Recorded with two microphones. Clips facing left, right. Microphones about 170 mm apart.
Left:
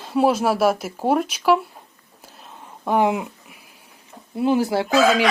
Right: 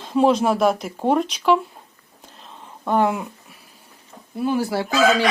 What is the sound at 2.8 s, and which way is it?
Speech, 15° left (ahead or behind).